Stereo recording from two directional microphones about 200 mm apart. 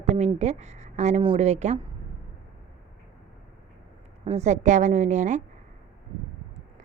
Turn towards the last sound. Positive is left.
turn(degrees=-35)  # may be behind; listen again after turning